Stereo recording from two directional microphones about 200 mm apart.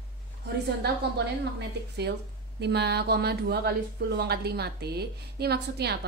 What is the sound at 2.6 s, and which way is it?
Speech, 55° right (ahead or behind).